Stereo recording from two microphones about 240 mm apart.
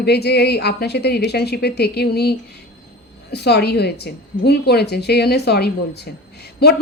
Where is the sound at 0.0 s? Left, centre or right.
Left.